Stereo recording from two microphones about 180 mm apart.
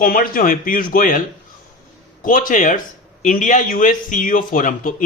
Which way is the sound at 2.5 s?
45° left (ahead or behind).